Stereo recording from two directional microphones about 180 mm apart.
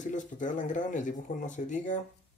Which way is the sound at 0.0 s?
45° left (ahead or behind).